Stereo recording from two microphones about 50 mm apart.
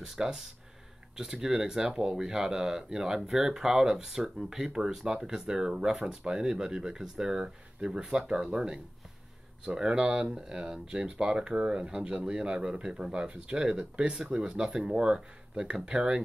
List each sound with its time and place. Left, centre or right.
0.0 s speech: centre